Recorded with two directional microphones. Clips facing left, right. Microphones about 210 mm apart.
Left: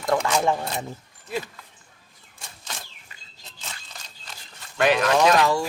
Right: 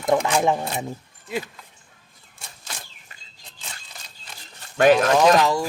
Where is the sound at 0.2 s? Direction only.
15° right (ahead or behind).